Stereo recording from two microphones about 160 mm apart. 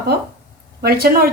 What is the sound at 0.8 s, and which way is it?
Speech, 70° right (ahead or behind).